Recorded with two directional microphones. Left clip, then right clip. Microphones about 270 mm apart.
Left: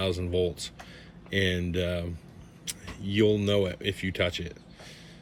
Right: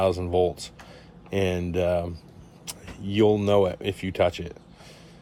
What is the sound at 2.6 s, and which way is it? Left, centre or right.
Speech, centre.